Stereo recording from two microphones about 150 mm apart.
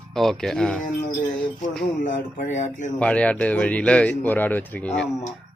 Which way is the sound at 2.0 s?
60° left (ahead or behind).